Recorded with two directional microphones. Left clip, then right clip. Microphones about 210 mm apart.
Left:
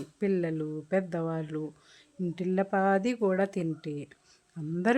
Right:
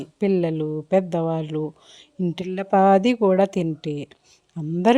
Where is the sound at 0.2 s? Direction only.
20° right (ahead or behind).